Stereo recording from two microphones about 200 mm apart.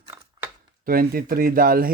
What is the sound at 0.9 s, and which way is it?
Speech, 45° right (ahead or behind).